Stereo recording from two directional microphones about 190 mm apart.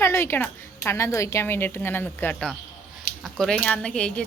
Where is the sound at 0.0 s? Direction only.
15° left (ahead or behind).